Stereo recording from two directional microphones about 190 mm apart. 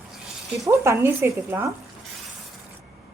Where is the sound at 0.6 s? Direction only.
15° right (ahead or behind).